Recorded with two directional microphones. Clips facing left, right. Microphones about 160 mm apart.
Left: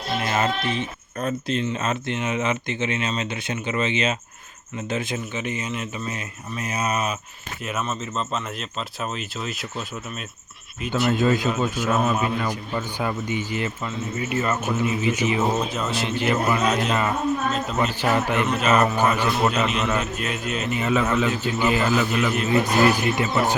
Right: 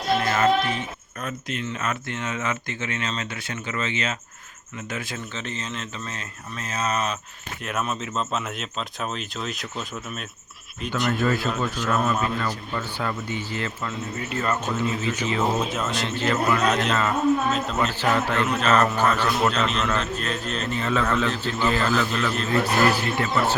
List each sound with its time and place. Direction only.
0.3 s a man's voice: 20° left (ahead or behind); by 11.1 s 5° left (ahead or behind)
11.1 s a man's voice: 20° left (ahead or behind)
15.6 s speech: centre (ahead or behind)
16.0 s a man's voice: 15° left (ahead or behind)
17.7 s a man's voice: 15° left (ahead or behind)